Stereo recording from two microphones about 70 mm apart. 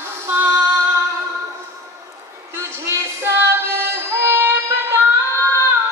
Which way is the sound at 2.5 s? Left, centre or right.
Right.